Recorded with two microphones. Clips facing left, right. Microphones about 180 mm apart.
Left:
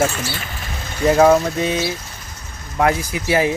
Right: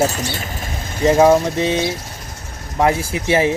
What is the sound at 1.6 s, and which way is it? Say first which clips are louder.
Speech: right 2 dB; 30° right (ahead or behind).